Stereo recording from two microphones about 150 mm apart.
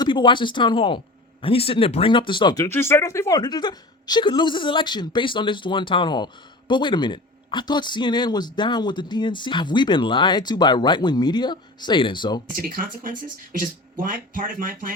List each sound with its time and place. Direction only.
0.0 s a woman's voice: 30° left (ahead or behind)
2.6 s a woman's voice: 15° left (ahead or behind); by 12.4 s 30° left (ahead or behind)
12.5 s speech: 70° right (ahead or behind)